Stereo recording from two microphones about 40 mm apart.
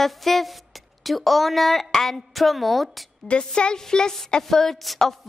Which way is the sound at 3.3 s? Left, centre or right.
Left.